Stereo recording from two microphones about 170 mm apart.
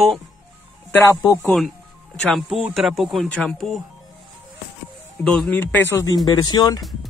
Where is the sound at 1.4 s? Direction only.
Centre (ahead or behind).